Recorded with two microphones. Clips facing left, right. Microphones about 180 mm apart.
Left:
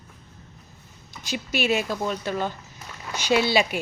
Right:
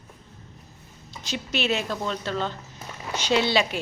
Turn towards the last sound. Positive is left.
turn(degrees=10)  # may be behind; listen again after turning